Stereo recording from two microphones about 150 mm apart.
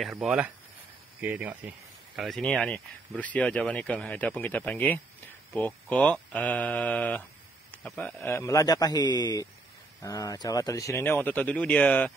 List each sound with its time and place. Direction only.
0.0 s speech: centre (ahead or behind)
2.1 s a man's voice: centre (ahead or behind)